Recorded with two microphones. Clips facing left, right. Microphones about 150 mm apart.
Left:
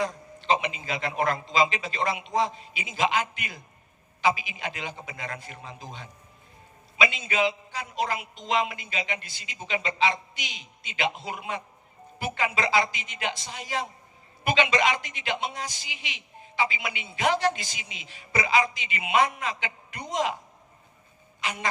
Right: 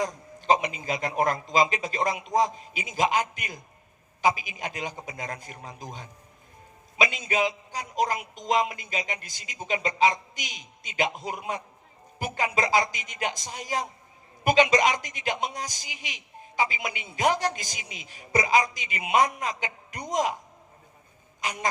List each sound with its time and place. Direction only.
0.0 s a man's voice: 45° right (ahead or behind)
21.4 s a man's voice: 40° right (ahead or behind)